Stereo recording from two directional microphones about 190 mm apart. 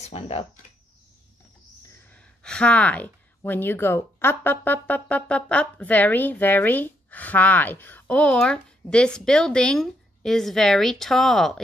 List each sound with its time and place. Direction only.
0.0 s speech: 30° left (ahead or behind)
2.0 s speech: 5° left (ahead or behind)